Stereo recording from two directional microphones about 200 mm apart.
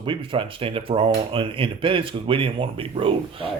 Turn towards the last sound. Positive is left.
turn(degrees=-25)  # may be behind; listen again after turning